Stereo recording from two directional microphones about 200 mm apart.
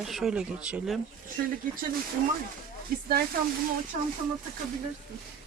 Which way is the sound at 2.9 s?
45° right (ahead or behind).